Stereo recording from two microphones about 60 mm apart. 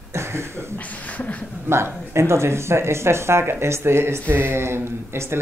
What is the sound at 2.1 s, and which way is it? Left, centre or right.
Speech, right.